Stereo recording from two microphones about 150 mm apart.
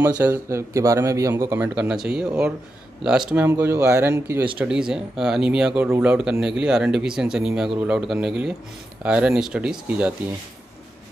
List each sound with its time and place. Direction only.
0.1 s a man's voice: 15° right (ahead or behind)
3.4 s speech: 20° right (ahead or behind)
4.6 s a man's voice: 5° right (ahead or behind)